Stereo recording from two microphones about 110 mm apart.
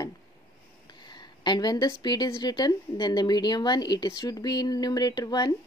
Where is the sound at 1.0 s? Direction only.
40° left (ahead or behind).